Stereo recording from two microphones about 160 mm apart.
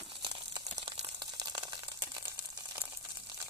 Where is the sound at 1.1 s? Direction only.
25° right (ahead or behind).